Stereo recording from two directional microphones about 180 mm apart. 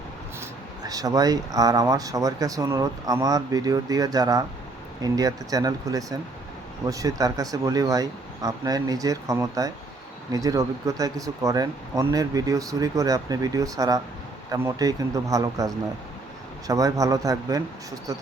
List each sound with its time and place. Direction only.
0.9 s speech: 20° right (ahead or behind)